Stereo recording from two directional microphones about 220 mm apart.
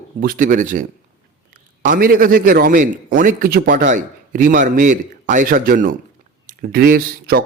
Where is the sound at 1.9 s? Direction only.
40° right (ahead or behind).